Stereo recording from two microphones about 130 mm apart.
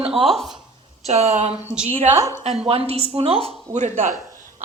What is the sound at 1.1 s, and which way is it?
Speech, 60° right (ahead or behind).